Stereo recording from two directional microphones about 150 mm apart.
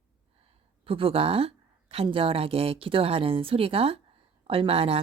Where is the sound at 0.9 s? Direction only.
40° right (ahead or behind).